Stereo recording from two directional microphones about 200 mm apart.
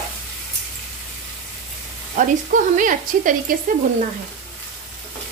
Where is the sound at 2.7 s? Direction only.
40° right (ahead or behind).